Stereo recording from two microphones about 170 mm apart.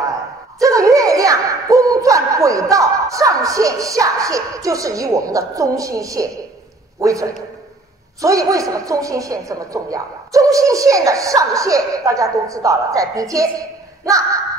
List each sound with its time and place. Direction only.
0.6 s a woman's voice: 20° right (ahead or behind)